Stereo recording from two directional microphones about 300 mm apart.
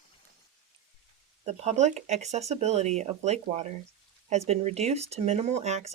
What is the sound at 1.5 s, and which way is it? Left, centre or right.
Speech, right.